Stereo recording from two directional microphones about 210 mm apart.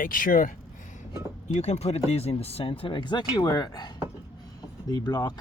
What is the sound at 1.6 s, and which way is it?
Speech, 30° left (ahead or behind).